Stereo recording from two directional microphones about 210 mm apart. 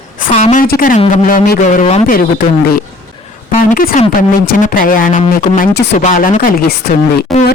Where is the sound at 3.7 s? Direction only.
40° left (ahead or behind).